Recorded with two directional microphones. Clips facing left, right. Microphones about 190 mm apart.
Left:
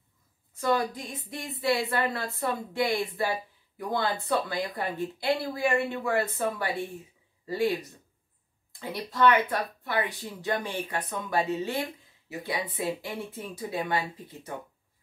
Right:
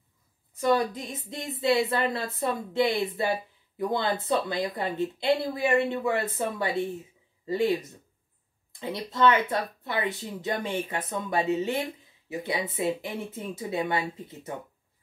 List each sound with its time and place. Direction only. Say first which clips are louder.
0.6 s speech: right 3 dB; 20° right (ahead or behind)
3.7 s speech: right 2 dB; 20° right (ahead or behind)
8.7 s speech: right 1 dB; 20° right (ahead or behind)